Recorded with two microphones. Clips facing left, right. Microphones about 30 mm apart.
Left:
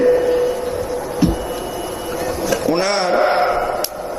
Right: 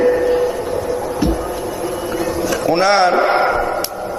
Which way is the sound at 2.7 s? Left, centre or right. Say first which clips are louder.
Right 5 dB; centre.